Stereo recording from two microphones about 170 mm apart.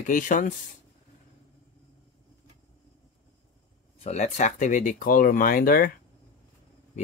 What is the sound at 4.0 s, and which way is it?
Speech, 40° left (ahead or behind).